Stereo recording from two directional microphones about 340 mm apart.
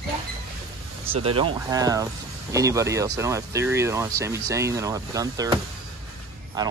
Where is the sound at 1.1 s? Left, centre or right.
Centre.